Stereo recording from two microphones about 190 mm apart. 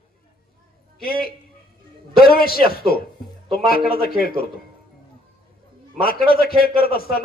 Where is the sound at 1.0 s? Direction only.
55° left (ahead or behind).